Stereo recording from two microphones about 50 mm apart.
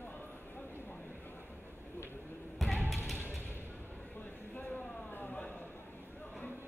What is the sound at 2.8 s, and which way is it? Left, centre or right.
Basketball bounce, centre.